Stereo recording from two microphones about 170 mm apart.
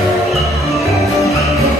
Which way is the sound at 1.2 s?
20° left (ahead or behind).